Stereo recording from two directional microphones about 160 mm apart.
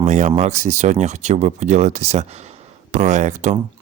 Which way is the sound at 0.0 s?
45° right (ahead or behind).